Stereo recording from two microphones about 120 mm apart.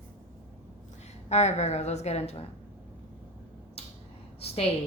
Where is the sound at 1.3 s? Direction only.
65° left (ahead or behind).